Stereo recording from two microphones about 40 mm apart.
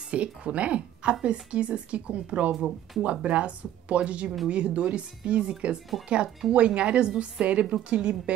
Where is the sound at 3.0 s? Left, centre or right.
Right.